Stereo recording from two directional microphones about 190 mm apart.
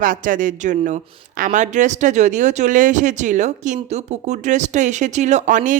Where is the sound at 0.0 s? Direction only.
45° right (ahead or behind).